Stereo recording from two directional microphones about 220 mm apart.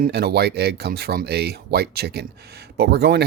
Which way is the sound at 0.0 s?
45° right (ahead or behind).